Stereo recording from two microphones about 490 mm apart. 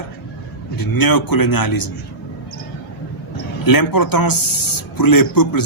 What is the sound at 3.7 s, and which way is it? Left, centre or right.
A man's voice, left.